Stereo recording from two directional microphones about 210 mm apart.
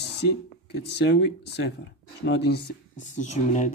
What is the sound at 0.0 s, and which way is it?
Speech, 55° left (ahead or behind).